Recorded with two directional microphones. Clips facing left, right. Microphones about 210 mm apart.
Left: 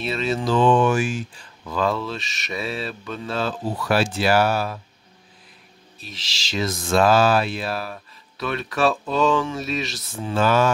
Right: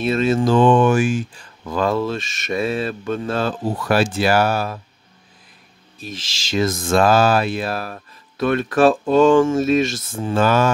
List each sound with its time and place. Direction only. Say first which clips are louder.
0.0 s speech: right 7 dB; 50° right (ahead or behind)
5.9 s speech: right 7 dB; 50° right (ahead or behind)